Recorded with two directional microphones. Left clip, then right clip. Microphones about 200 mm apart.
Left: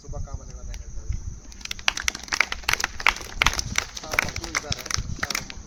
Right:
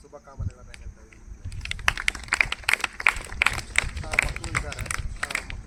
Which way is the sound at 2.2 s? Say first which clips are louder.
Even; 50° left (ahead or behind).